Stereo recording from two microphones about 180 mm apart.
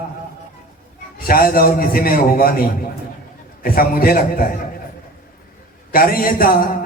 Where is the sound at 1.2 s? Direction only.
55° left (ahead or behind).